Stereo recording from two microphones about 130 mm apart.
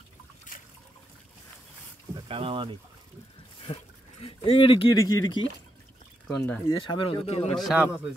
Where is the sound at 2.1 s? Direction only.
45° right (ahead or behind).